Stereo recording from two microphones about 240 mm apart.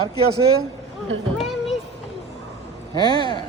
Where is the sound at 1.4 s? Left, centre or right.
Centre.